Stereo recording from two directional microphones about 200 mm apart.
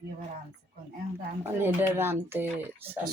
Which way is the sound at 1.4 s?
10° right (ahead or behind).